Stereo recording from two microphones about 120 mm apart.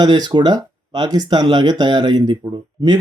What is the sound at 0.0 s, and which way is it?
Speech, 35° right (ahead or behind).